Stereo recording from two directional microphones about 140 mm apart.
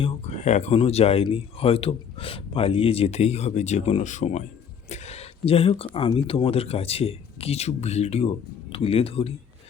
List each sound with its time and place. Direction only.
0.0 s speech: 55° left (ahead or behind)